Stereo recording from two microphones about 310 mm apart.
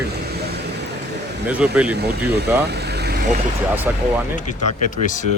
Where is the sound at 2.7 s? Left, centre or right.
Right.